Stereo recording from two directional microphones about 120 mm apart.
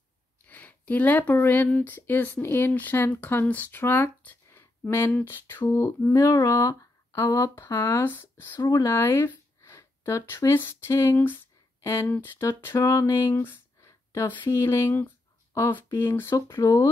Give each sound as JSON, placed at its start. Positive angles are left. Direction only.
{"t": 0.5, "sound": "speech", "side_deg": 15}